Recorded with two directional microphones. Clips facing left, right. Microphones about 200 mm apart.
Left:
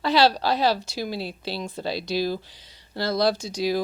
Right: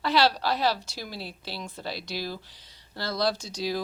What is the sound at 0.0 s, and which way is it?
Speech, 15° left (ahead or behind).